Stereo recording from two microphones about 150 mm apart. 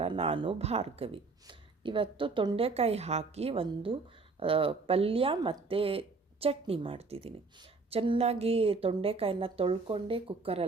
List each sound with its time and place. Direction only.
0.0 s speech: 40° right (ahead or behind)